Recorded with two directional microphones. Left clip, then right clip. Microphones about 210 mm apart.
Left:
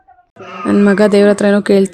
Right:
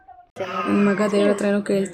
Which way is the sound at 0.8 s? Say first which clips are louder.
Left 11 dB; 40° left (ahead or behind).